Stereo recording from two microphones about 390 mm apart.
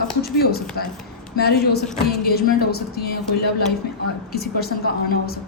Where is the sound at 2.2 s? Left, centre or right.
Left.